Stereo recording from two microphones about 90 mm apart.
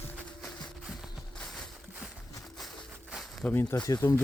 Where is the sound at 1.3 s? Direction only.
5° left (ahead or behind).